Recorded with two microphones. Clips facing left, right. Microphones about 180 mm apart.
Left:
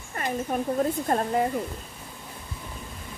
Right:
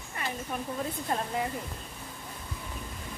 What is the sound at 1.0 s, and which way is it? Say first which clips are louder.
Speech: left 7 dB; 45° left (ahead or behind).